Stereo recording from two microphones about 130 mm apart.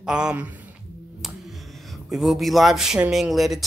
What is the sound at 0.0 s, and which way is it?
Speech, 5° right (ahead or behind).